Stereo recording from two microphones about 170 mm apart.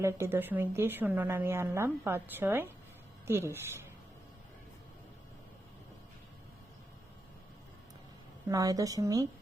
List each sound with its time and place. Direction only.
0.0 s a woman's voice: 15° right (ahead or behind)
8.4 s a woman's voice: 20° right (ahead or behind)